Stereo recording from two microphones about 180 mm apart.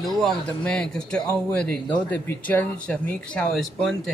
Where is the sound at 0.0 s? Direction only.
Centre (ahead or behind).